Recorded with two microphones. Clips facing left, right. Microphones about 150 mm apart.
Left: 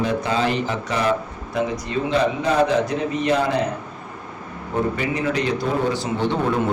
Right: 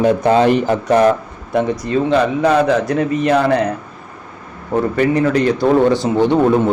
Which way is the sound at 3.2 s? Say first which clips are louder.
Right 5 dB; 60° right (ahead or behind).